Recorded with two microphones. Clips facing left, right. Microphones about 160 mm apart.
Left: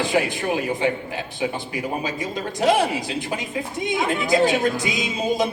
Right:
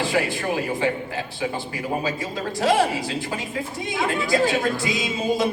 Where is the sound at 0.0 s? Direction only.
20° left (ahead or behind).